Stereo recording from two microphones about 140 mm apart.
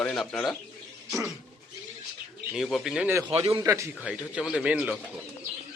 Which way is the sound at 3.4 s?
45° right (ahead or behind).